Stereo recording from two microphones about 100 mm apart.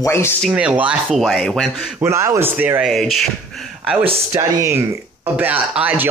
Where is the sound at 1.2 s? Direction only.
Centre (ahead or behind).